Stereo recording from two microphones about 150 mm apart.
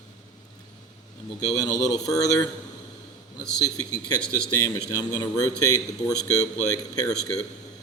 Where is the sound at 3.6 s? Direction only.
25° left (ahead or behind).